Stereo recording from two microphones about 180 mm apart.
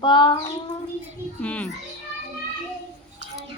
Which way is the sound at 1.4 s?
5° left (ahead or behind).